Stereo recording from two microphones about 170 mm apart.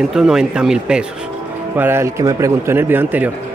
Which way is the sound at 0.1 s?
5° right (ahead or behind).